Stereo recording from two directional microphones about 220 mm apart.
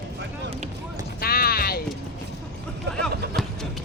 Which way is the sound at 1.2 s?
45° left (ahead or behind).